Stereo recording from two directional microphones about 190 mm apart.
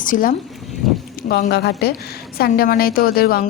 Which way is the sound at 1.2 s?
55° left (ahead or behind).